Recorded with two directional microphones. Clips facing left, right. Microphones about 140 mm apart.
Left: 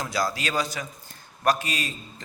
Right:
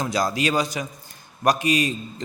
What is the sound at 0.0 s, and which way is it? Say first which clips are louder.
A man's voice: right 5 dB; 20° right (ahead or behind).